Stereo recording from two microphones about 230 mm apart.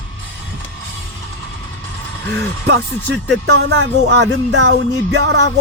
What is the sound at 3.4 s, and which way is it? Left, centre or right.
Music, right.